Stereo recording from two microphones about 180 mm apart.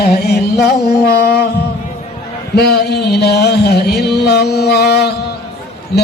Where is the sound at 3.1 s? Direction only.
65° left (ahead or behind).